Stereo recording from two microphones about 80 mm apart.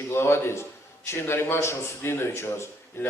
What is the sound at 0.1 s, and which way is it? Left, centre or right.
A man's voice, left.